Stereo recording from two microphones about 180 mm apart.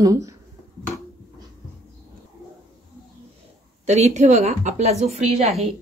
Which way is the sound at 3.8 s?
40° right (ahead or behind).